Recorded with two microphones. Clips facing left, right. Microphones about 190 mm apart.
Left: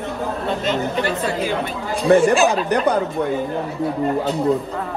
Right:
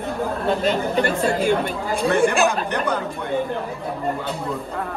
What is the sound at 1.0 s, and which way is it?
Speech, 50° right (ahead or behind).